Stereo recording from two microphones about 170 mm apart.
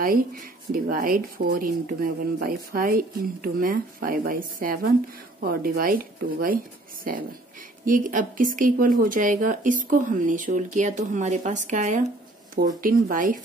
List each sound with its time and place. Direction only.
0.7 s a woman's voice: 55° right (ahead or behind)